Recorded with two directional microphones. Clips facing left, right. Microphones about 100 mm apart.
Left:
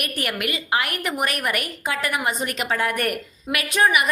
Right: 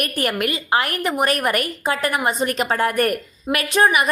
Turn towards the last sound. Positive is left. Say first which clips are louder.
# right 3 dB
turn(degrees=-30)  # may be behind; listen again after turning